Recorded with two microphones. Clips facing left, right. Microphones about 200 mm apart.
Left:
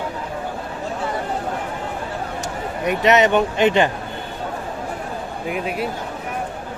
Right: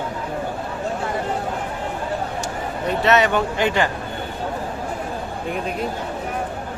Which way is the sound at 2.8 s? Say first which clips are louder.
Left 2 dB; 15° left (ahead or behind).